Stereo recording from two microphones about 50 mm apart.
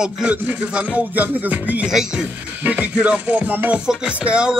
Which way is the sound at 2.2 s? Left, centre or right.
Right.